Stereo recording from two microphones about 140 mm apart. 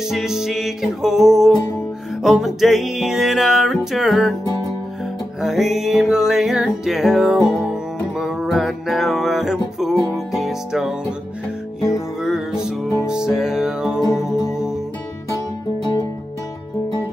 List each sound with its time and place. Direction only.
0.1 s music: 5° right (ahead or behind)
5.4 s music: centre (ahead or behind)
12.2 s music: 5° right (ahead or behind)
14.2 s music: 20° left (ahead or behind)